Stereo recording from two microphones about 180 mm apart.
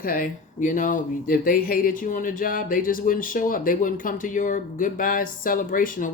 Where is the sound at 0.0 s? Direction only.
50° left (ahead or behind).